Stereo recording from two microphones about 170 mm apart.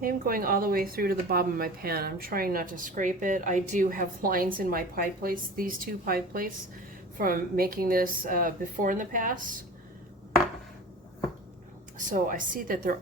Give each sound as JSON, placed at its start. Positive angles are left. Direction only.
{"t": 0.0, "sound": "speech", "side_deg": -55}
{"t": 11.9, "sound": "speech", "side_deg": -50}